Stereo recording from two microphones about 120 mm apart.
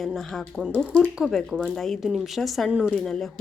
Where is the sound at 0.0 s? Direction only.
Centre (ahead or behind).